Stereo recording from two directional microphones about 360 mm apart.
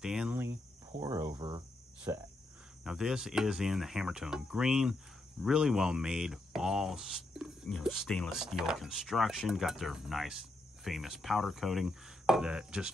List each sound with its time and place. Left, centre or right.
0.0 s cricket: centre
2.8 s speech: centre